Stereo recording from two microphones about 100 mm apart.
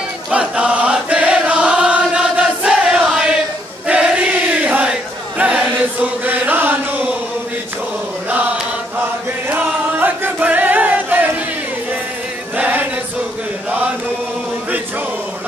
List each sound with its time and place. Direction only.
0.3 s chant: 10° right (ahead or behind)
3.8 s choir: 10° right (ahead or behind)
5.4 s chant: 15° right (ahead or behind)
9.5 s chant: 15° right (ahead or behind)
12.5 s chant: 15° right (ahead or behind)